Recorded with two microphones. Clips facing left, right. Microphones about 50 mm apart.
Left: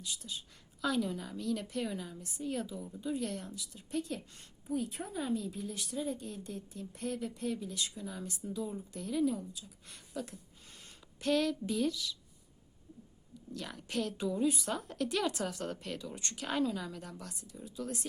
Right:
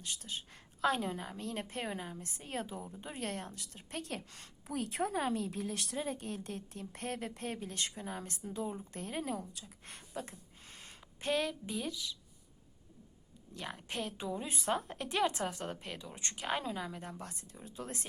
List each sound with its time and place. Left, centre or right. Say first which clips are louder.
0.0 s a woman's voice: even; right
9.8 s speech: left 2 dB; right
10.8 s a sound: right 1 dB; right
13.5 s speech: left 2 dB; right